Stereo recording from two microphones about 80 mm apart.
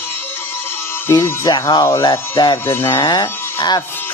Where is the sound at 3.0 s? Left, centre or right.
Left.